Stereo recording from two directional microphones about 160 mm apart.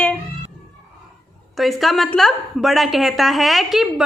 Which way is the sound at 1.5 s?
Centre (ahead or behind).